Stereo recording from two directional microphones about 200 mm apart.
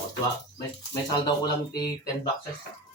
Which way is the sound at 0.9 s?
20° left (ahead or behind).